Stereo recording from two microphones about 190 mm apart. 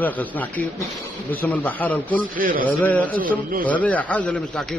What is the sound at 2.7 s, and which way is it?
A man's voice, 10° left (ahead or behind).